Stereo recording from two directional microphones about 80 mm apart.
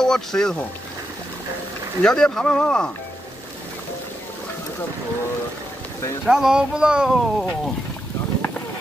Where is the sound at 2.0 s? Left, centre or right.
Centre.